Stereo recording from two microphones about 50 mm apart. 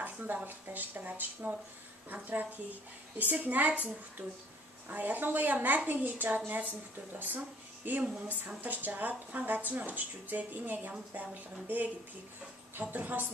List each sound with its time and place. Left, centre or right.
0.0 s a sound: right
0.5 s a woman's voice: right
12.9 s a woman's voice: right